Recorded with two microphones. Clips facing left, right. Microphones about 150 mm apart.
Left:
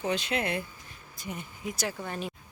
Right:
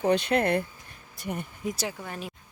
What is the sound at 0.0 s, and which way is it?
Speech, 55° right (ahead or behind).